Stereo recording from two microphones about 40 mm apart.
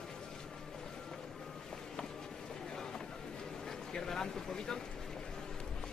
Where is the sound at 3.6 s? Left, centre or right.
Centre.